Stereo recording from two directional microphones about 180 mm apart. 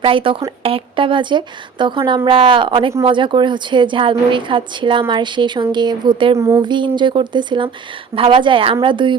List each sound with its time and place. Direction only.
0.0 s a woman's voice: 30° right (ahead or behind)